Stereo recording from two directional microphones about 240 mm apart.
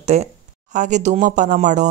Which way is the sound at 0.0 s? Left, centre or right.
Right.